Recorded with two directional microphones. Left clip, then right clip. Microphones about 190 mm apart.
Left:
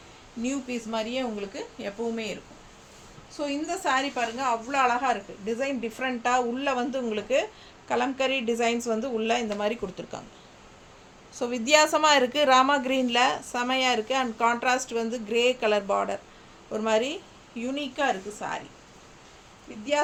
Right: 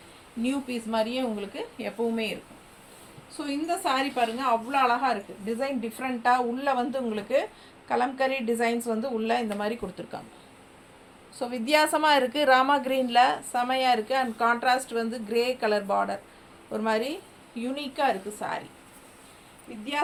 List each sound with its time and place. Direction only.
0.4 s speech: 20° left (ahead or behind)
3.4 s speech: 15° left (ahead or behind)
11.3 s a woman's voice: 30° left (ahead or behind)